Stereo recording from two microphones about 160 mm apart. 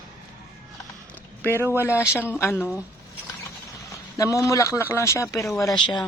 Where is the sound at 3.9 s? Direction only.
20° left (ahead or behind).